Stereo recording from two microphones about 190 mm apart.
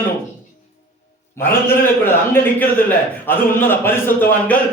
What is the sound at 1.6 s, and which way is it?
A man's voice, 10° left (ahead or behind).